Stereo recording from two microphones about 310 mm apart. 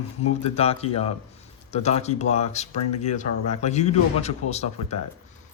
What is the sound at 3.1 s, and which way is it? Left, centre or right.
Speech, left.